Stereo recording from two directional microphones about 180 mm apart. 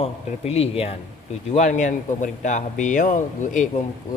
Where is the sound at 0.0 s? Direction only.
35° left (ahead or behind).